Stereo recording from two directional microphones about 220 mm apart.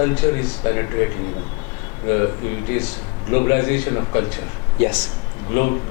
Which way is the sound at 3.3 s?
15° left (ahead or behind).